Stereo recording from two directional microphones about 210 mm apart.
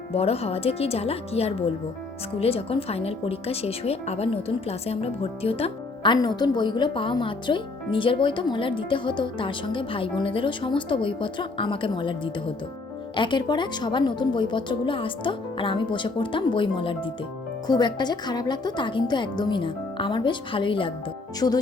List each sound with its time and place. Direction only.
0.1 s speech: 30° left (ahead or behind)